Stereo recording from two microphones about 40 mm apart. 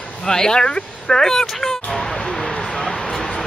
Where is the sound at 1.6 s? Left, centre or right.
Centre.